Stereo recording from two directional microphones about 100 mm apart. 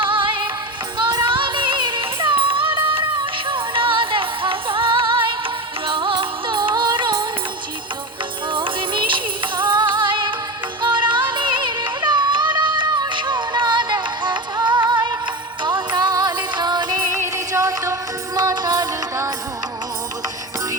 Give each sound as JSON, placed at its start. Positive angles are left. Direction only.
{"t": 0.0, "sound": "music", "side_deg": -55}
{"t": 8.5, "sound": "music", "side_deg": -55}
{"t": 17.1, "sound": "music", "side_deg": -30}